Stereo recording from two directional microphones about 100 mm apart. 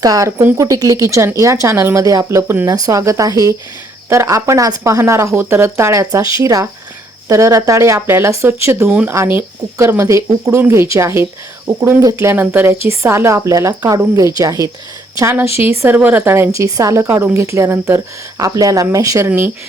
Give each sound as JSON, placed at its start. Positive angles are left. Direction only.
{"t": 0.0, "sound": "speech", "side_deg": -35}
{"t": 8.9, "sound": "speech", "side_deg": -15}
{"t": 9.1, "sound": "a woman's voice", "side_deg": -25}